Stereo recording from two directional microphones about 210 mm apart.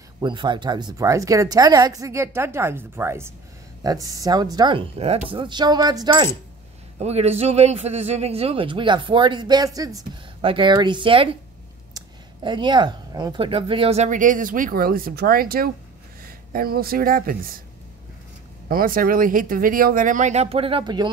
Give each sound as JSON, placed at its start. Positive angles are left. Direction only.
{"t": 0.2, "sound": "a man's voice", "side_deg": -20}
{"t": 7.0, "sound": "a man's voice", "side_deg": -30}
{"t": 12.4, "sound": "speech", "side_deg": -20}
{"t": 18.7, "sound": "speech", "side_deg": -45}